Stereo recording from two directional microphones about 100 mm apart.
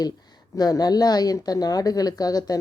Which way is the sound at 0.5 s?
40° left (ahead or behind).